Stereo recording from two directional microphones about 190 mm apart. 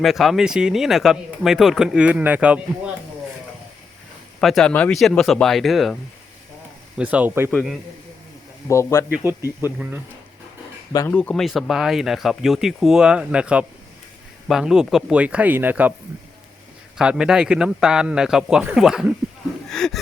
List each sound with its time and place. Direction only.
0.0 s speech: centre (ahead or behind)
4.4 s speech: centre (ahead or behind)
7.0 s speech: 5° right (ahead or behind)
7.5 s speech: centre (ahead or behind)
8.7 s speech: 15° left (ahead or behind)
9.7 s speech: 5° right (ahead or behind)
10.9 s speech: 15° left (ahead or behind)
11.2 s speech: 5° left (ahead or behind)
17.0 s speech: 5° right (ahead or behind)